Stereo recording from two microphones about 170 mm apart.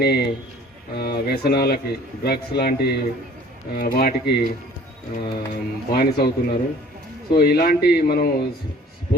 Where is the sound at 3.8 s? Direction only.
55° left (ahead or behind).